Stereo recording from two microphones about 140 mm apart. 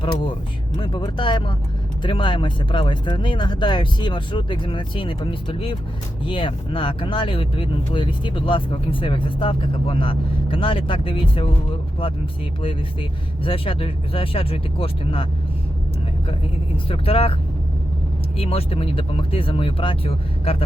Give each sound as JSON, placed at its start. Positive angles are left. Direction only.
{"t": 0.8, "sound": "speech", "side_deg": 35}
{"t": 12.6, "sound": "speech", "side_deg": 40}
{"t": 16.7, "sound": "speech", "side_deg": 40}
{"t": 18.3, "sound": "speech", "side_deg": 45}